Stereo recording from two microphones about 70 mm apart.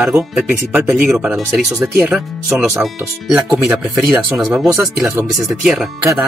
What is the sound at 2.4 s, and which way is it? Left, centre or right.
Speech, right.